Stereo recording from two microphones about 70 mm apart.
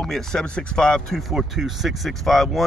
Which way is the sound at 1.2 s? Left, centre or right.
Centre.